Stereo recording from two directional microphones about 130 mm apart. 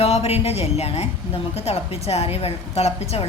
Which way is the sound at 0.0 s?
50° left (ahead or behind).